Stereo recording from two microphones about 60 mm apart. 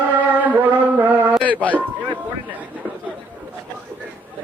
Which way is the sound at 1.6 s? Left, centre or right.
Left.